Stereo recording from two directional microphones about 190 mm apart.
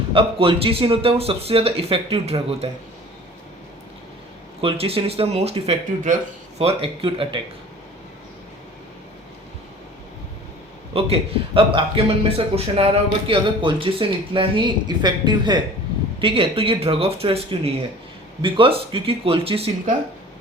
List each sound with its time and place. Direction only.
0.1 s a man's voice: 30° right (ahead or behind)
4.6 s a man's voice: 30° right (ahead or behind)
10.9 s a man's voice: 30° right (ahead or behind)